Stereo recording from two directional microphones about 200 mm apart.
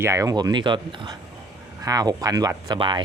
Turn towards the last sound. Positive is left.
turn(degrees=-25)  # may be behind; listen again after turning